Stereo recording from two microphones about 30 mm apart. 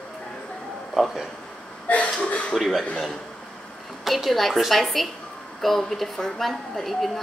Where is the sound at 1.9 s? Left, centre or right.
Left.